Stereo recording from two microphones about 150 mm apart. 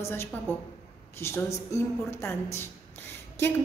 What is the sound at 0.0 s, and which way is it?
A woman's voice, 15° left (ahead or behind).